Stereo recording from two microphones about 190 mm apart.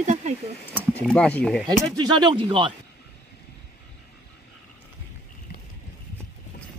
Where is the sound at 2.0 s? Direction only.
25° right (ahead or behind).